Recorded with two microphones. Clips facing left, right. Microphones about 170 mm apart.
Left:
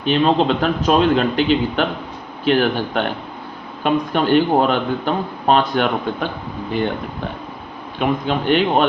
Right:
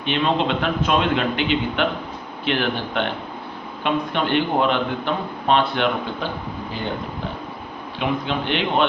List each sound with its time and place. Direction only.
0.0 s speech: 40° left (ahead or behind)
7.9 s speech: 45° left (ahead or behind)